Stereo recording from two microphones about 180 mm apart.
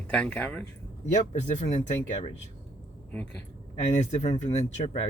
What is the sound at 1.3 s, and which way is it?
Speech, 40° left (ahead or behind).